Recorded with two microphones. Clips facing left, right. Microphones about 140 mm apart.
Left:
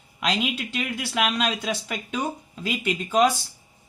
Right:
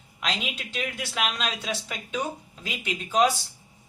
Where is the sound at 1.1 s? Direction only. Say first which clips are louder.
Left 6 dB; 55° left (ahead or behind).